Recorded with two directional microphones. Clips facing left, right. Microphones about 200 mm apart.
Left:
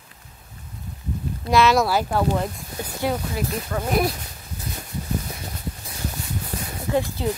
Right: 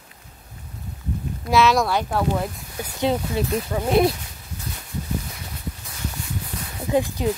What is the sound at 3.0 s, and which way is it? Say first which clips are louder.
Speech: right 3 dB; 25° right (ahead or behind).